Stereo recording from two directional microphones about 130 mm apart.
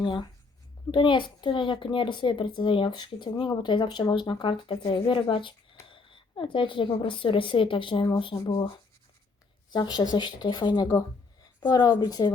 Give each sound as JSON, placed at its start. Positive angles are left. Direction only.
{"t": 0.0, "sound": "a child's voice", "side_deg": 40}
{"t": 9.6, "sound": "a child's voice", "side_deg": 35}